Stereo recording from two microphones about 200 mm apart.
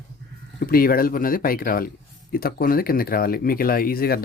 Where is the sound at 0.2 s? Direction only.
60° right (ahead or behind).